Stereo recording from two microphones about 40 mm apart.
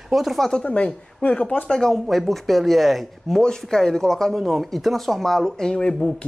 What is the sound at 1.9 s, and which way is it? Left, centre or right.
Speech, centre.